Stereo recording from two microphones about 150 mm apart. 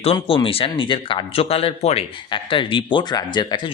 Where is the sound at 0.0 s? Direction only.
40° left (ahead or behind).